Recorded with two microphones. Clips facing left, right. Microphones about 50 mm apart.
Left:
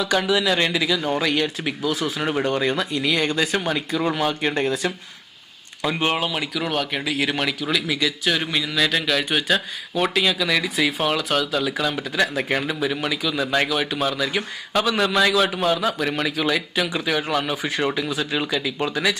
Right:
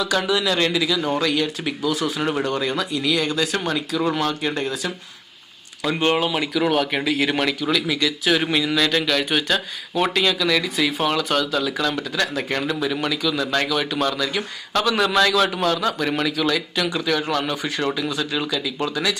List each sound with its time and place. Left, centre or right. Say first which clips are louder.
0.0 s speech: left 1 dB; centre
4.6 s speech: left 3 dB; left
5.8 s speech: right 2 dB; centre
16.4 s speech: even; centre